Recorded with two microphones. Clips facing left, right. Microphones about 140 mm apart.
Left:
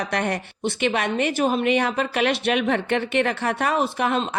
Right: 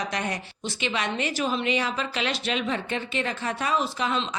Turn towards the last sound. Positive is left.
turn(degrees=55)  # may be behind; listen again after turning